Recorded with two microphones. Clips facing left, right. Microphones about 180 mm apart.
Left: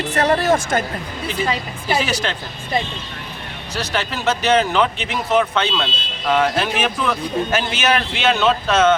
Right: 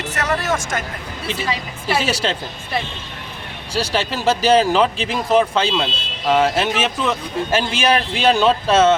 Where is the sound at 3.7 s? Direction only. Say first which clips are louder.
Right 3 dB; 30° right (ahead or behind).